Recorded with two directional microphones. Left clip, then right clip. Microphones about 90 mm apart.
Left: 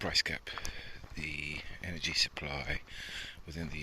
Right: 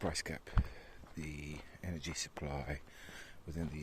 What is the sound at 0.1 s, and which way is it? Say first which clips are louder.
Speech: left 9 dB; 35° right (ahead or behind).